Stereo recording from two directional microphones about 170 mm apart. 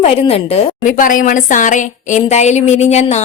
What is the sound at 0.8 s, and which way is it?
Speech, 50° left (ahead or behind).